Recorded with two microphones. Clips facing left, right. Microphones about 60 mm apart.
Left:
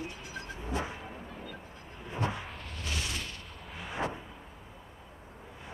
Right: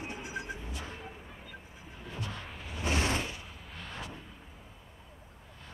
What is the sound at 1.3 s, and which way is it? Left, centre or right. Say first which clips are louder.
Vehicle: left 4 dB; centre.